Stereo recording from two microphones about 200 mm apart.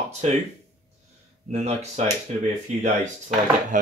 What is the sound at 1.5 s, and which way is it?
Speech, 35° right (ahead or behind).